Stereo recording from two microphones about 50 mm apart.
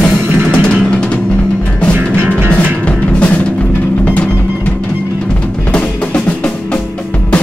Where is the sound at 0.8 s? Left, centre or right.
Left.